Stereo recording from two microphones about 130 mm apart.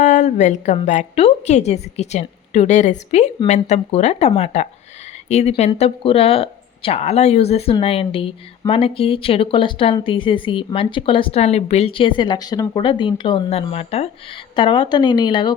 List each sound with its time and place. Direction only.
0.0 s a woman's voice: 65° left (ahead or behind); by 15.5 s 35° left (ahead or behind)